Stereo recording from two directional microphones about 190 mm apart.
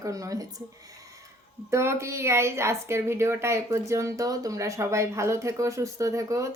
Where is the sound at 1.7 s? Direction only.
15° right (ahead or behind).